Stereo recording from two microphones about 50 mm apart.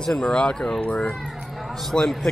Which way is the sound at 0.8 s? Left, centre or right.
Left.